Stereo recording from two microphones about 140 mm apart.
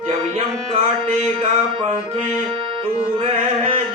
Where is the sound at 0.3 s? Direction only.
45° right (ahead or behind).